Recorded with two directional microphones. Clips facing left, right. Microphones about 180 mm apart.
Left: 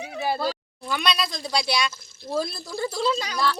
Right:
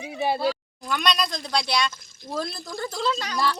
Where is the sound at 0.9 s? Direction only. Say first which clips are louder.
Right 1 dB; 5° left (ahead or behind).